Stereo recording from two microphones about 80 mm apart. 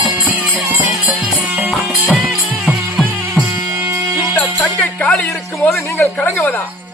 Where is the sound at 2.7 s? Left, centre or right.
Centre.